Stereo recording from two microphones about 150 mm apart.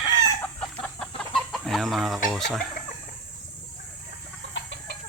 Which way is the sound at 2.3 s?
Centre (ahead or behind).